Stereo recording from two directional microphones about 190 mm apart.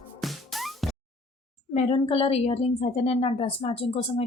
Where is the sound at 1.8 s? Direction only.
30° left (ahead or behind).